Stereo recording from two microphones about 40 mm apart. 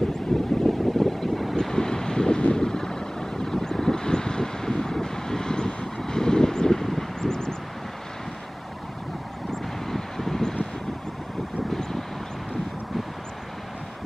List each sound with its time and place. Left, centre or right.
0.3 s wind: centre
0.7 s vehicle: centre
1.7 s vehicle: centre
9.5 s vehicle: centre